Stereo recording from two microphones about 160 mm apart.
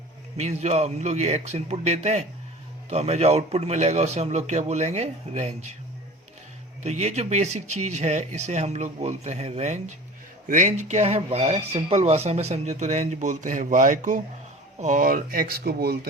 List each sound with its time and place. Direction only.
0.3 s speech: 45° right (ahead or behind)
6.8 s speech: 45° right (ahead or behind); by 16.0 s 75° right (ahead or behind)